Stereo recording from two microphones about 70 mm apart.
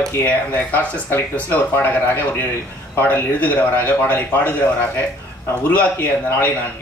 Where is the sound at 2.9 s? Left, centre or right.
Left.